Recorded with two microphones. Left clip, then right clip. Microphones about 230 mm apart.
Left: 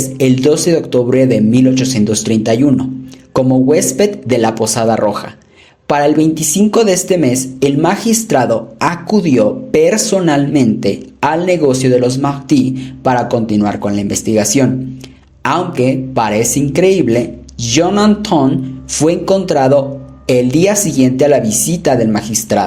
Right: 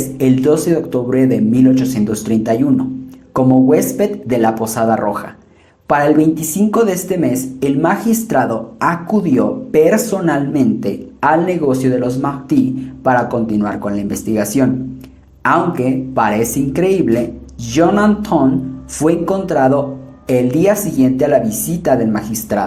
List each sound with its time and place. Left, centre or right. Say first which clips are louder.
0.2 s speech: left 2 dB; left